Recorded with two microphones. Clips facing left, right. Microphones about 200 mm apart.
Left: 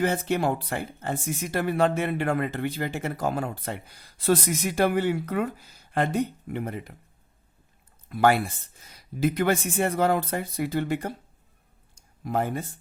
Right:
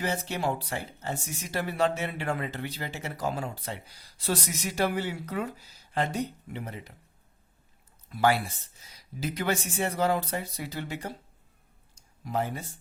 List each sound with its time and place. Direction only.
0.0 s speech: 55° left (ahead or behind)
8.1 s speech: 55° left (ahead or behind)
11.9 s a sound: 55° left (ahead or behind)